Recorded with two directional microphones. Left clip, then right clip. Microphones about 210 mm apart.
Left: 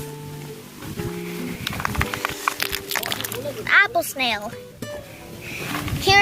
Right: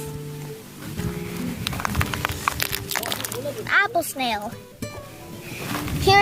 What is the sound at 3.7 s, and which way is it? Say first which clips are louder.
Speech: left 3 dB; 30° right (ahead or behind).